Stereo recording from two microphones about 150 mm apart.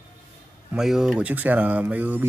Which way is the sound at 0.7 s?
5° right (ahead or behind).